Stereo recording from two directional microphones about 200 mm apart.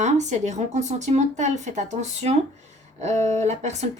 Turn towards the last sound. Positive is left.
turn(degrees=-35)  # may be behind; listen again after turning